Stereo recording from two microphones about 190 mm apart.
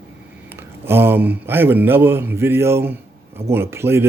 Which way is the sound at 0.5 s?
10° right (ahead or behind).